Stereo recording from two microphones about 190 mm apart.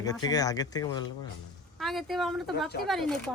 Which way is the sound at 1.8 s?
Centre (ahead or behind).